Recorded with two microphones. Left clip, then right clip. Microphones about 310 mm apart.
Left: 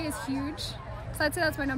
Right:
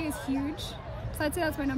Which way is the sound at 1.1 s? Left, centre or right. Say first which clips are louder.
Left 3 dB; centre.